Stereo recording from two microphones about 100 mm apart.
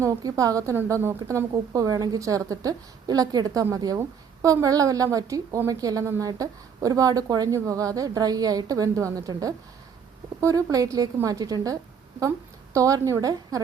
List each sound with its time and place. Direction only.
0.0 s a woman's voice: 35° right (ahead or behind)